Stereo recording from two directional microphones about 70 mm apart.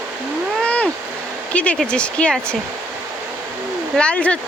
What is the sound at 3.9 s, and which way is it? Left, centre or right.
Speech, centre.